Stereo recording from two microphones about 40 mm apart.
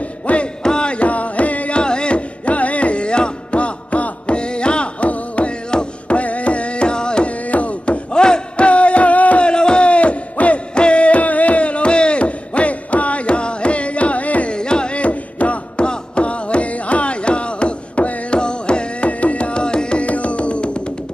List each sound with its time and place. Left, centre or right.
0.3 s a sound: left
0.7 s music: left
1.8 s music: left
5.7 s carnatic music: left
7.4 s music: left
9.4 s music: left
14.5 s carnatic music: left